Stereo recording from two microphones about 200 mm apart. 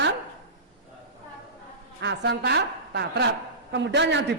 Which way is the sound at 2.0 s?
60° right (ahead or behind).